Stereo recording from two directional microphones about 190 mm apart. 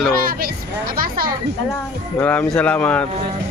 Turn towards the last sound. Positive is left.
turn(degrees=5)  # may be behind; listen again after turning